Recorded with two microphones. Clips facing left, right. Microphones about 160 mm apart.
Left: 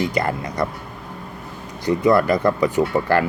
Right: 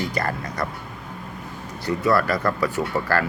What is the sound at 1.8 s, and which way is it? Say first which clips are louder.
Speech: left 4 dB; 15° left (ahead or behind).